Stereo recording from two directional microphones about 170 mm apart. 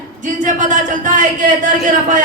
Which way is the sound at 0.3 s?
45° right (ahead or behind).